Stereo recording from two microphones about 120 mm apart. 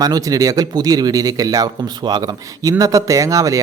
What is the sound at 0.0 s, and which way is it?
A man's voice, 30° right (ahead or behind).